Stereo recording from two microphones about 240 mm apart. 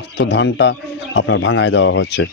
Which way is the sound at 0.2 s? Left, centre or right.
Left.